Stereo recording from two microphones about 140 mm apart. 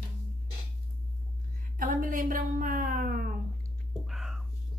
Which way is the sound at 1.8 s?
75° right (ahead or behind).